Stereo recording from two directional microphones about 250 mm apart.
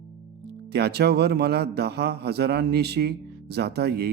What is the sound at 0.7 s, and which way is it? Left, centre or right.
A man's voice, right.